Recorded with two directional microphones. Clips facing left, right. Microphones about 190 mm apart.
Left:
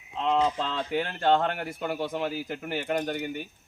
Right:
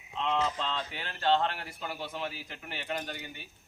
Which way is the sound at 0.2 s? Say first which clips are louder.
Left 5 dB; 40° left (ahead or behind).